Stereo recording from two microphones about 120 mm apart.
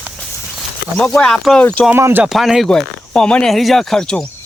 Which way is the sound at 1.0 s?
5° left (ahead or behind).